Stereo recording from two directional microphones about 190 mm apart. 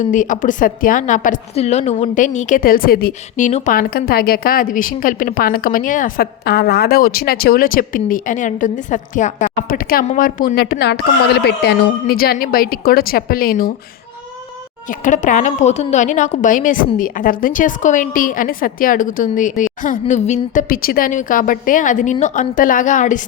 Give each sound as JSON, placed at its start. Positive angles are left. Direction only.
{"t": 0.0, "sound": "a woman's voice", "side_deg": 40}
{"t": 14.8, "sound": "a woman's voice", "side_deg": 40}